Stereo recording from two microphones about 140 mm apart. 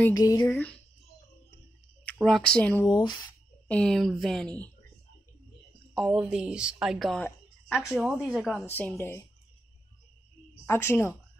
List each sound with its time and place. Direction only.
0.1 s speech: 25° left (ahead or behind)
2.2 s speech: 5° left (ahead or behind)
2.9 s speech: 30° left (ahead or behind)
3.6 s a woman's voice: 5° left (ahead or behind)
5.9 s a woman's voice: 5° right (ahead or behind)
7.2 s a sound: 10° left (ahead or behind)
7.7 s a woman's voice: centre (ahead or behind)
8.6 s speech: 15° left (ahead or behind)
10.6 s speech: 15° left (ahead or behind)